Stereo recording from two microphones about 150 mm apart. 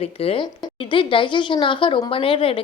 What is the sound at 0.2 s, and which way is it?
A woman's voice, 40° left (ahead or behind).